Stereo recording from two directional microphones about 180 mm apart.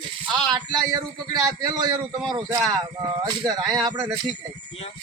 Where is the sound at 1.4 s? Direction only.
20° right (ahead or behind).